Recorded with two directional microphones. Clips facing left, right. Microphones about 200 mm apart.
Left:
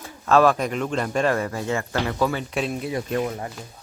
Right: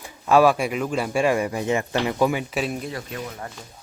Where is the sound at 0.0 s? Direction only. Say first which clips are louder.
Right 1 dB; 10° right (ahead or behind).